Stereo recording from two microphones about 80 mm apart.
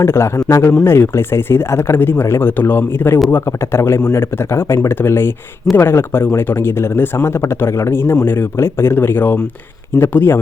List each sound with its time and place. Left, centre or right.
0.0 s speech: left